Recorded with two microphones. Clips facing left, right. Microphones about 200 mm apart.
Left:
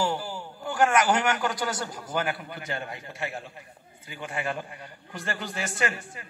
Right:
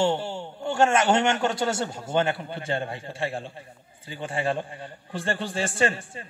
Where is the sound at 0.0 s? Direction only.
25° right (ahead or behind).